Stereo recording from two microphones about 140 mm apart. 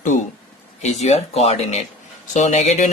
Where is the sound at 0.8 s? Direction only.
50° left (ahead or behind).